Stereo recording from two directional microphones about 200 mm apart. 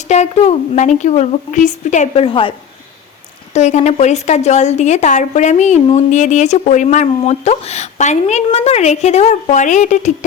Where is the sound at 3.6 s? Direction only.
35° left (ahead or behind).